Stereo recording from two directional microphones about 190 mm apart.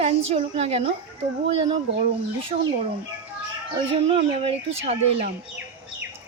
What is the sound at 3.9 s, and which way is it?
Speech, 30° right (ahead or behind).